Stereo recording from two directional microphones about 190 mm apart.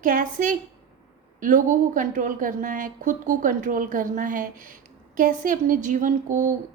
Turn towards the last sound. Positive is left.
turn(degrees=-45)  # may be behind; listen again after turning